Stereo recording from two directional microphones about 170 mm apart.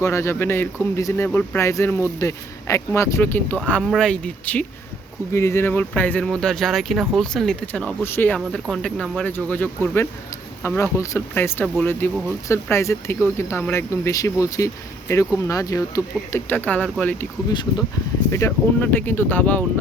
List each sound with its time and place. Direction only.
0.0 s speech: 15° left (ahead or behind)
8.4 s speech: centre (ahead or behind)
17.5 s speech: 25° left (ahead or behind); by 19.6 s 10° left (ahead or behind)